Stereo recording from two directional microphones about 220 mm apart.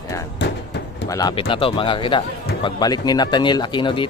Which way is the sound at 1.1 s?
20° left (ahead or behind).